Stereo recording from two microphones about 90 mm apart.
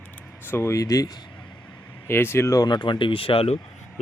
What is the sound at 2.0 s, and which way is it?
Speech, 25° left (ahead or behind).